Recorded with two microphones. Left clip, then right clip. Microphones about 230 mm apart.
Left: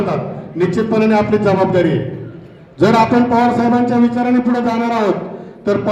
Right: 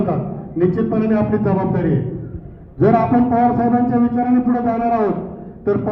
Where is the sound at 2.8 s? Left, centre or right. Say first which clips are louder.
Left 3 dB; left.